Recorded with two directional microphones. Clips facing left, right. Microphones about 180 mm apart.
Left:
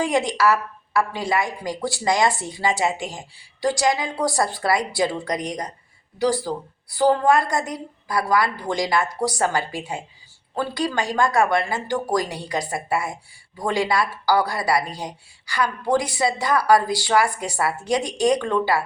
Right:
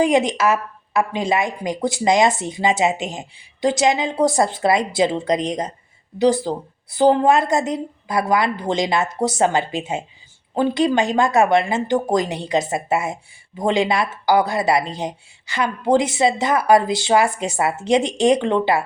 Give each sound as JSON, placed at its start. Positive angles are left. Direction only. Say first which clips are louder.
{"t": 0.0, "sound": "a woman's voice", "louder": "right 4 dB", "side_deg": -20}